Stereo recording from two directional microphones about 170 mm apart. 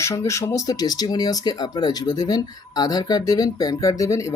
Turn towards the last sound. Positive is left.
turn(degrees=20)  # may be behind; listen again after turning